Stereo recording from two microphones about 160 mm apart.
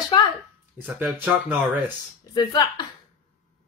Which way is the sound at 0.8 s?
10° right (ahead or behind).